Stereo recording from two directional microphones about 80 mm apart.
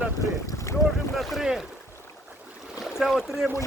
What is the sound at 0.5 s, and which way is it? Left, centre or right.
Boat, left.